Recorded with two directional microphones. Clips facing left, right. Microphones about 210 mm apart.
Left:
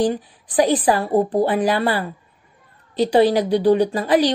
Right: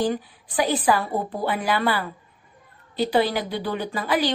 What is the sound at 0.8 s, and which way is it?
A woman's voice, 35° left (ahead or behind).